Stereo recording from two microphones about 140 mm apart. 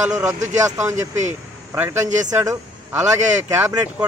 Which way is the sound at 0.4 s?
60° right (ahead or behind).